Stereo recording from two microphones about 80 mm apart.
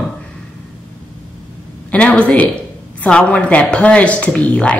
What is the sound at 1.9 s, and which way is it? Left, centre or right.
A woman's voice, centre.